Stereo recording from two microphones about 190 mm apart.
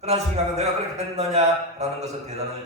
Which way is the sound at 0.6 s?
35° right (ahead or behind).